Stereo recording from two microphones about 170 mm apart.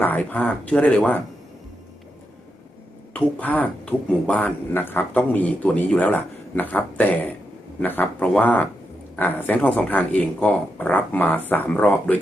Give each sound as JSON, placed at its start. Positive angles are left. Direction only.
{"t": 0.0, "sound": "speech", "side_deg": 10}
{"t": 3.1, "sound": "speech", "side_deg": 10}